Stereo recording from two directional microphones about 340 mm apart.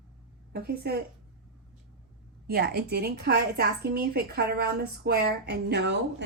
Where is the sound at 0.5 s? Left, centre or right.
Right.